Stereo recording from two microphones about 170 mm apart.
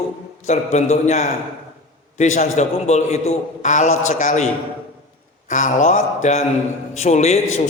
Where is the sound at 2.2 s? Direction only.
45° left (ahead or behind).